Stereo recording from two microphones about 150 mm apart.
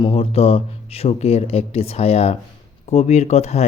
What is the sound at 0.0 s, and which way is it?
Speech, 40° left (ahead or behind).